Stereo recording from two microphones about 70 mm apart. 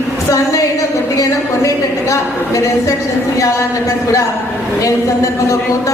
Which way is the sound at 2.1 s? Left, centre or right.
Left.